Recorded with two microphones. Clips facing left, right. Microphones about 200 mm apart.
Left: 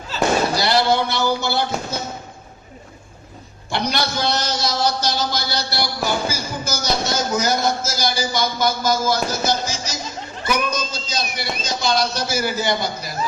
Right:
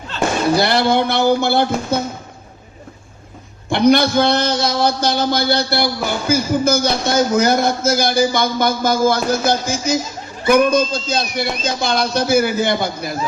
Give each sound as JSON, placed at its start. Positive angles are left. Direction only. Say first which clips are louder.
{"t": 0.5, "sound": "a man's voice", "louder": "right 3 dB", "side_deg": -55}
{"t": 3.7, "sound": "a man's voice", "louder": "right 10 dB", "side_deg": -55}